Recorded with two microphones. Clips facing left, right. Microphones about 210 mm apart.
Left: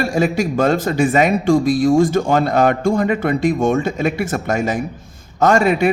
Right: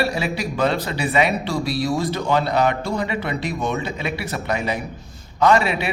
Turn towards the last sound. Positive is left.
turn(degrees=45)  # may be behind; listen again after turning